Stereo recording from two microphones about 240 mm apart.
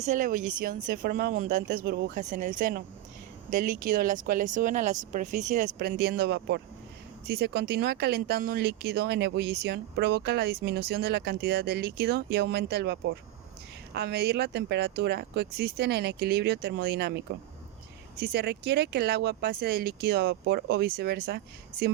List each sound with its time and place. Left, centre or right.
0.0 s speech: right
18.2 s speech: right